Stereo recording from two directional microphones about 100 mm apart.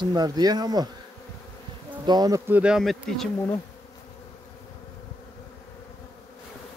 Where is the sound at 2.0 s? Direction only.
40° right (ahead or behind).